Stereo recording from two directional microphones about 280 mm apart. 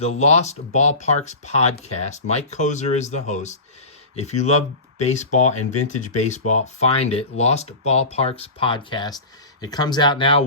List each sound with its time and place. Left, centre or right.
0.0 s speech: left